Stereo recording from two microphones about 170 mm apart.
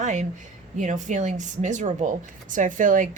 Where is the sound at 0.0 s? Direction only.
45° right (ahead or behind).